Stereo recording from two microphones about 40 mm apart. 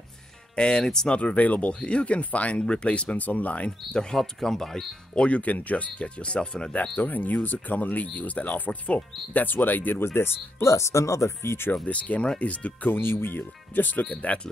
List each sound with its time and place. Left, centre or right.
0.6 s speech: centre
1.0 s speech: left
1.7 s speech: left
3.9 s speech: centre
5.1 s speech: left
5.4 s speech: left
7.0 s speech: left
10.0 s speech: left
11.8 s speech: left
12.9 s speech: left